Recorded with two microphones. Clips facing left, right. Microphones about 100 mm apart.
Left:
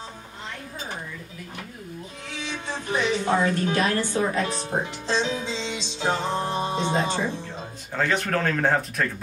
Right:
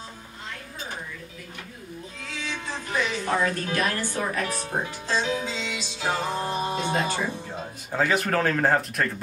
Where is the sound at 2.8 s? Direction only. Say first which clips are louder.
Left 4 dB; 25° left (ahead or behind).